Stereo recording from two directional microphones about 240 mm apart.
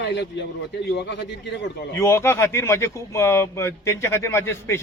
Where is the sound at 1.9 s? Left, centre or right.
Centre.